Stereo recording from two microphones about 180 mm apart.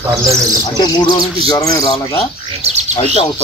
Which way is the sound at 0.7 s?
20° left (ahead or behind).